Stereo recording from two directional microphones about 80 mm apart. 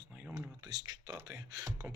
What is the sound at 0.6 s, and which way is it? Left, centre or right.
Speech, right.